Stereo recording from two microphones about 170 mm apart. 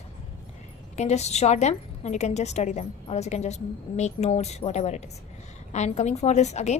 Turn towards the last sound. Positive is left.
turn(degrees=40)  # may be behind; listen again after turning